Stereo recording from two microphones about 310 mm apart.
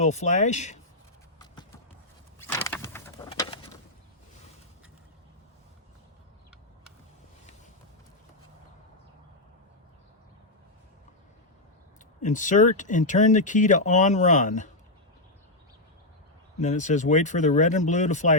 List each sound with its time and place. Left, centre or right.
0.0 s speech: left
1.4 s vehicle: centre
2.4 s a sound: centre
3.2 s pigeon: centre
12.2 s speech: left
16.6 s speech: left